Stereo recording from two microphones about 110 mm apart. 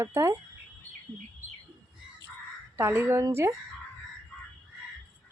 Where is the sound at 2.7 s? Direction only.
20° right (ahead or behind).